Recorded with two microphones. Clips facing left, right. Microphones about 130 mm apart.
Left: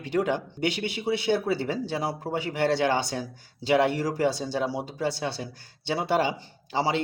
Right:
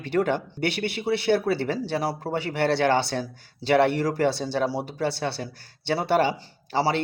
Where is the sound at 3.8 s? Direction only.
60° right (ahead or behind).